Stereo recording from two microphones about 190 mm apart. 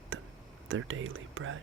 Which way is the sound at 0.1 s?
90° right.